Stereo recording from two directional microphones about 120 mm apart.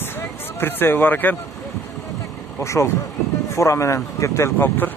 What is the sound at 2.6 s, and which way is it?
Speech, 25° left (ahead or behind).